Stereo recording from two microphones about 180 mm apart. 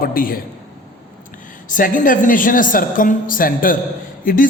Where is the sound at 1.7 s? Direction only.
50° left (ahead or behind).